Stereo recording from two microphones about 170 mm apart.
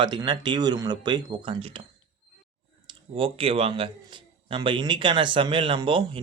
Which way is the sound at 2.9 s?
35° right (ahead or behind).